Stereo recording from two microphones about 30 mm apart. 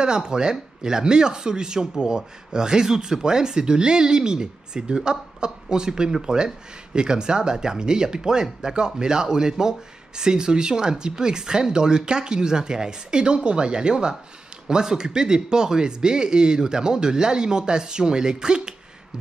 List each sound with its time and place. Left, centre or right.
0.0 s speech: right